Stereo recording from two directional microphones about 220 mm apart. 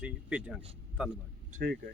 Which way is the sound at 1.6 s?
45° right (ahead or behind).